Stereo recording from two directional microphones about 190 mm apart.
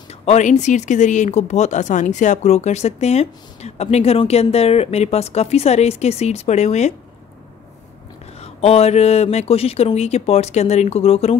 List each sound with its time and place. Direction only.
0.1 s speech: 35° left (ahead or behind)
8.4 s speech: 35° left (ahead or behind)